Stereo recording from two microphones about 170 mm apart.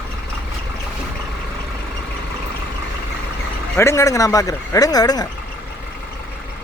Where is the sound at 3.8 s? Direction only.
15° left (ahead or behind).